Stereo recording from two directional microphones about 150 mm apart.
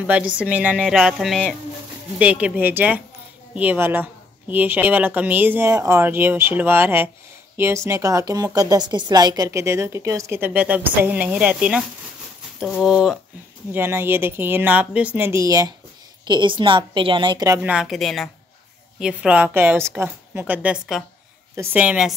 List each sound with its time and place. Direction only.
0.0 s a woman's voice: 10° right (ahead or behind)
13.7 s a woman's voice: 15° right (ahead or behind); by 17.5 s 30° right (ahead or behind)
17.5 s speech: 10° right (ahead or behind)